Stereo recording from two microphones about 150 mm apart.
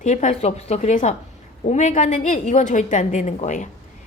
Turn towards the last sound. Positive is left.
turn(degrees=55)  # may be behind; listen again after turning